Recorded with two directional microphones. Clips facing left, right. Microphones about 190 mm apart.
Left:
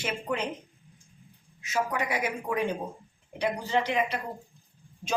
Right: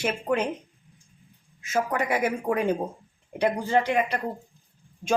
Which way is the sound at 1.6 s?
50° right (ahead or behind).